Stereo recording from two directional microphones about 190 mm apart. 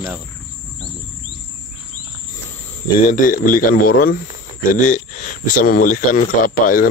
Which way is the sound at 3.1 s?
45° left (ahead or behind).